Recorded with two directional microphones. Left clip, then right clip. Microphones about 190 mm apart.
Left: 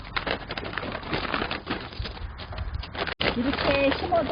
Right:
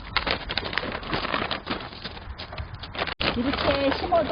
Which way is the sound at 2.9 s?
Centre (ahead or behind).